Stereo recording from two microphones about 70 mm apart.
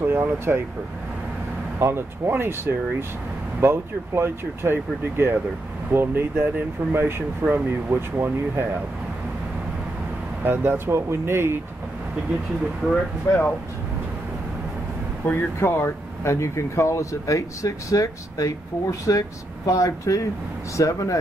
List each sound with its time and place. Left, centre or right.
0.0 s speech: right
1.8 s speech: right
10.4 s speech: right
13.3 s speech: left
15.2 s speech: left